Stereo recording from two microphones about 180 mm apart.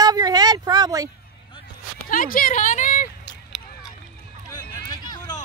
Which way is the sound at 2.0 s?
50° left (ahead or behind).